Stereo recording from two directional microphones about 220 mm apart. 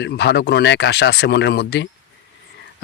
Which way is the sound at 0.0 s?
50° left (ahead or behind).